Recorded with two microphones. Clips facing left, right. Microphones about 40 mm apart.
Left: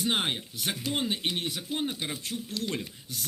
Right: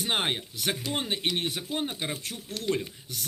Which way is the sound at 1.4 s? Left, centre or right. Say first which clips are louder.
Right 2 dB; right.